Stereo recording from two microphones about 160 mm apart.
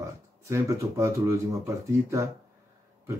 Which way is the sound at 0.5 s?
15° right (ahead or behind).